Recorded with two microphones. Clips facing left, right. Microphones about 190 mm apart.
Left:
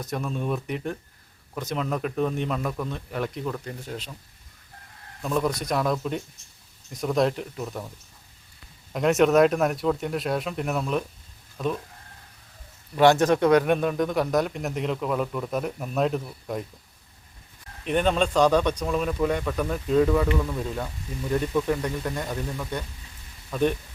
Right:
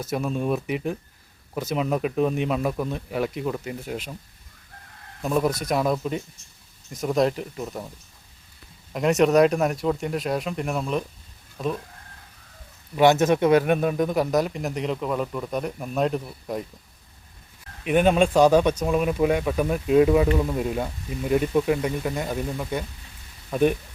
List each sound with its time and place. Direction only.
0.0 s speech: 5° right (ahead or behind)
5.2 s speech: 10° right (ahead or behind)
8.9 s speech: centre (ahead or behind)
13.0 s speech: 15° right (ahead or behind)
13.5 s speech: 5° right (ahead or behind)
17.8 s speech: 10° right (ahead or behind)
20.2 s speech: 30° right (ahead or behind); by 23.7 s 10° right (ahead or behind)